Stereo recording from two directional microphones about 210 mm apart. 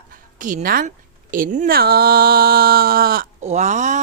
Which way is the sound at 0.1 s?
40° right (ahead or behind).